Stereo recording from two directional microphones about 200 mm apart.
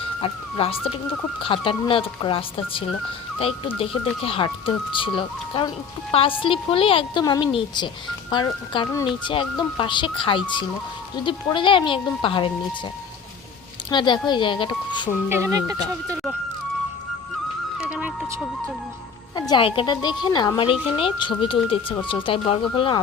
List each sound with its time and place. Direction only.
0.2 s speech: 25° left (ahead or behind)
13.9 s speech: 20° left (ahead or behind)
15.3 s speech: 15° right (ahead or behind)
17.7 s music: 5° right (ahead or behind)
19.4 s speech: 20° left (ahead or behind)